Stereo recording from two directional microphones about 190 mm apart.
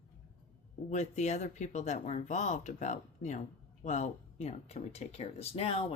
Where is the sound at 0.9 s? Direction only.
40° left (ahead or behind).